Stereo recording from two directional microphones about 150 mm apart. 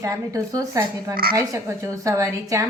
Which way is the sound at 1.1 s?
80° right.